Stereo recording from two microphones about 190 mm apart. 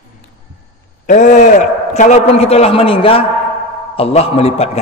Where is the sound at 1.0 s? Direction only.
45° left (ahead or behind).